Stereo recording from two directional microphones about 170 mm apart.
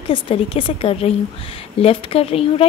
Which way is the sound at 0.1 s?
30° left (ahead or behind).